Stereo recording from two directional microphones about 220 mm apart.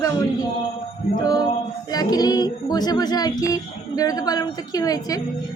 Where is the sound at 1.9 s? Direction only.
15° left (ahead or behind).